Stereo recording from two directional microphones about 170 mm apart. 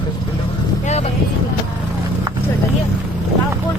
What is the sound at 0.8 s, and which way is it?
Vehicle, 40° left (ahead or behind).